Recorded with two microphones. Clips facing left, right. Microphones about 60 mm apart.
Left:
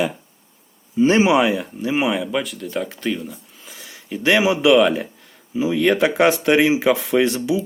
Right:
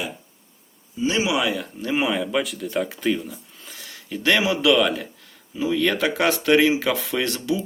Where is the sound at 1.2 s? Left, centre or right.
Left.